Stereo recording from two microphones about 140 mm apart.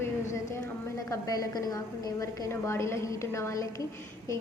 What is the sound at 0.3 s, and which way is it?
A woman's voice, 20° left (ahead or behind).